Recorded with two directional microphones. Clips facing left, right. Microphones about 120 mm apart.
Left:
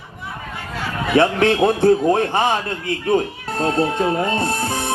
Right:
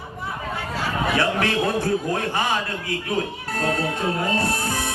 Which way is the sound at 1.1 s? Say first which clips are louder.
Left 9 dB; 25° left (ahead or behind).